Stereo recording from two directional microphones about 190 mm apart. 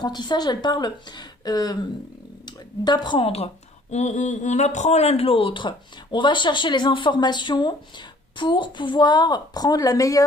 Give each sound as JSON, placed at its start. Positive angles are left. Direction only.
{"t": 0.0, "sound": "speech", "side_deg": 20}